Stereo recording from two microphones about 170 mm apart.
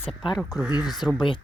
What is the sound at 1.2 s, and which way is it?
Speech, 30° left (ahead or behind).